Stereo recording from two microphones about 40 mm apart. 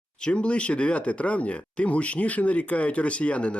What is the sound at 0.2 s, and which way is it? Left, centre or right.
Speech, left.